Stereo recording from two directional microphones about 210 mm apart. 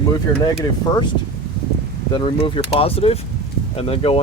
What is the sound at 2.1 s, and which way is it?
Speech, 25° left (ahead or behind).